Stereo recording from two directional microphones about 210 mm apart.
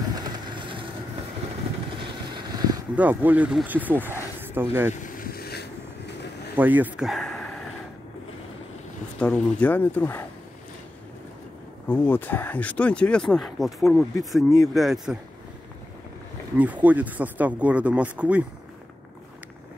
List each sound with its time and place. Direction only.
0.1 s vehicle: 25° right (ahead or behind)
2.3 s a sound: 20° right (ahead or behind)
3.0 s speech: 10° right (ahead or behind)
5.0 s vehicle: 40° left (ahead or behind)
6.5 s speech: 10° right (ahead or behind)
9.2 s speech: 5° left (ahead or behind)
11.9 s speech: 10° left (ahead or behind)
16.5 s speech: 5° right (ahead or behind)